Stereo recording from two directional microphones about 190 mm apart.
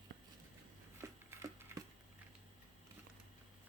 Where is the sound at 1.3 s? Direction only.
15° right (ahead or behind).